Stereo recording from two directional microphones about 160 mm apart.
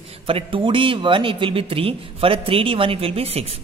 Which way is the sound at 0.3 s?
35° right (ahead or behind).